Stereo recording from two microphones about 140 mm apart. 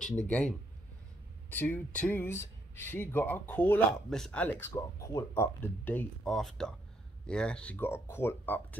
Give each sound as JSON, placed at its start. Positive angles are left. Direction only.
{"t": 0.3, "sound": "speech", "side_deg": 10}
{"t": 6.2, "sound": "speech", "side_deg": 0}